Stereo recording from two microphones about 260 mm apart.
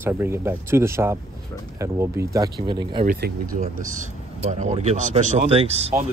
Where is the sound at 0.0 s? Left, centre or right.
Centre.